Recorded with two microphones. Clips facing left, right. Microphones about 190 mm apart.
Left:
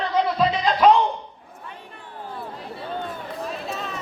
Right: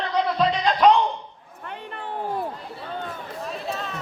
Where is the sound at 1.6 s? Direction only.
65° right (ahead or behind).